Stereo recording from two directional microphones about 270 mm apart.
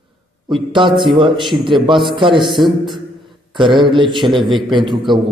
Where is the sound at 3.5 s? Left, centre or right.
Centre.